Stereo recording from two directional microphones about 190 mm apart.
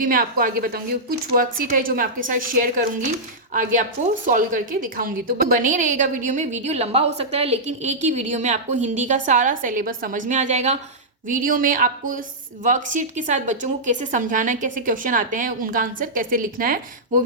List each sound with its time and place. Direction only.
0.0 s a woman's voice: 45° right (ahead or behind)